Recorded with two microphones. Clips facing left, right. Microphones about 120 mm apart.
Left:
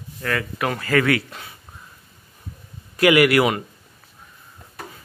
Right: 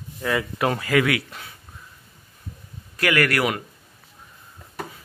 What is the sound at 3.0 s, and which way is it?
Speech, 15° left (ahead or behind).